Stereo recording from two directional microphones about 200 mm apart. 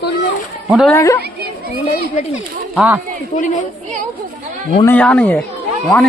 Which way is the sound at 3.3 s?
40° left (ahead or behind).